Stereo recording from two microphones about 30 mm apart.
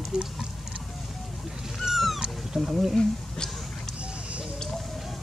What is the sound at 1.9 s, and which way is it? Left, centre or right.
Cat, centre.